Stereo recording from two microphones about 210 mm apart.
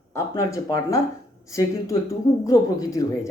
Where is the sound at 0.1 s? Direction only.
15° left (ahead or behind).